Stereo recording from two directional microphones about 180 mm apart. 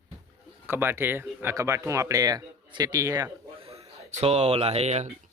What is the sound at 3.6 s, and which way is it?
Speech, 35° right (ahead or behind).